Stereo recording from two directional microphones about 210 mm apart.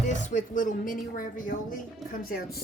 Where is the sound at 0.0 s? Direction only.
35° left (ahead or behind).